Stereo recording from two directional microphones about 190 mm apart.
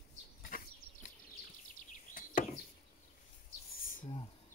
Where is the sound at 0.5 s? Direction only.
50° left (ahead or behind).